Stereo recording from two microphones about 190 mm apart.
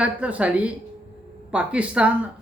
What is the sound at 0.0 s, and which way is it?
Speech, 5° right (ahead or behind).